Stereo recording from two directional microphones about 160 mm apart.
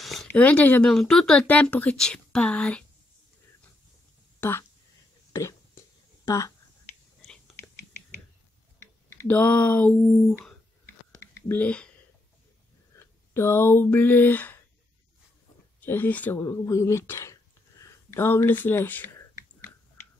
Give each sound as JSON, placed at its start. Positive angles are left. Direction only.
{"t": 0.0, "sound": "a sound", "side_deg": 0}
{"t": 0.3, "sound": "speech", "side_deg": 10}
{"t": 4.4, "sound": "speech", "side_deg": 15}
{"t": 5.3, "sound": "a sound", "side_deg": 20}
{"t": 6.2, "sound": "speech", "side_deg": 20}
{"t": 9.2, "sound": "speech", "side_deg": 10}
{"t": 13.0, "sound": "speech", "side_deg": 15}
{"t": 15.8, "sound": "speech", "side_deg": 10}